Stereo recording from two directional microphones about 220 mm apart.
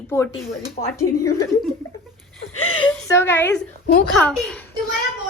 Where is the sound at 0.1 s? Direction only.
10° left (ahead or behind).